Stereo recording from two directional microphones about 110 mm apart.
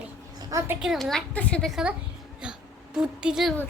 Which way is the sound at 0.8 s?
Centre (ahead or behind).